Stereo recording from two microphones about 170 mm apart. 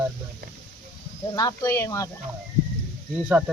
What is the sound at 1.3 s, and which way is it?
Speech, 20° left (ahead or behind).